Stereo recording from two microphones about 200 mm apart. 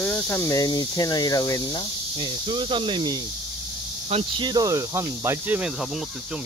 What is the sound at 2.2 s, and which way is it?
Cricket, 25° right (ahead or behind).